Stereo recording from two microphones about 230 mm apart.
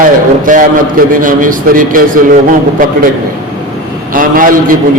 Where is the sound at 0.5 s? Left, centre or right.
Right.